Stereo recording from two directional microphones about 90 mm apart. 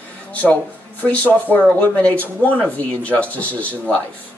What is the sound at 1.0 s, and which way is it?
Speech, 15° left (ahead or behind).